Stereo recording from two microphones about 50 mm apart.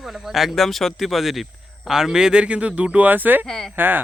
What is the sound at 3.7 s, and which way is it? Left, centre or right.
Speech, right.